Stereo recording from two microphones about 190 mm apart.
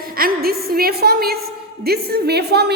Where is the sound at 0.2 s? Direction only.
50° right (ahead or behind).